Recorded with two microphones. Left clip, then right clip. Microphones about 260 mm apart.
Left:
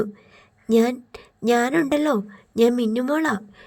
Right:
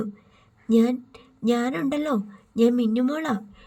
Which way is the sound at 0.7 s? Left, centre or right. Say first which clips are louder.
Left 3 dB; left.